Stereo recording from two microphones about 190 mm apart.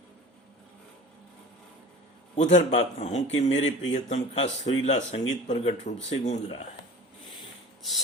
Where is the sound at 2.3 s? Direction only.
35° left (ahead or behind).